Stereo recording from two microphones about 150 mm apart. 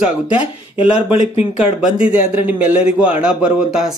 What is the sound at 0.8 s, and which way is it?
Speech, 40° left (ahead or behind).